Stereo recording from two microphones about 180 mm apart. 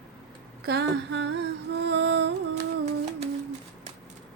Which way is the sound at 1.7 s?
70° right (ahead or behind).